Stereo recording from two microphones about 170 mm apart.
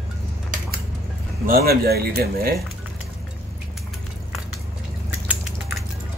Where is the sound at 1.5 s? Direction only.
65° right (ahead or behind).